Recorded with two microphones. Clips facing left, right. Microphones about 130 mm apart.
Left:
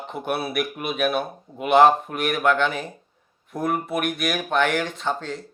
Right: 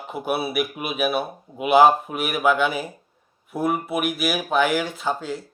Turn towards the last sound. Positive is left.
turn(degrees=-5)  # may be behind; listen again after turning